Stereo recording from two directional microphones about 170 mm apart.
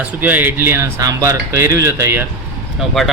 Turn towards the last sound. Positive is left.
turn(degrees=0)  # may be behind; listen again after turning